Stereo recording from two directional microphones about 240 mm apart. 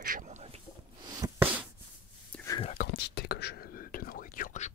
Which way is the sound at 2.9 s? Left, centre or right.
Left.